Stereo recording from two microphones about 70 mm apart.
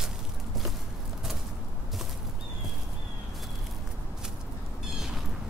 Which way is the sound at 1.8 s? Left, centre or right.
Centre.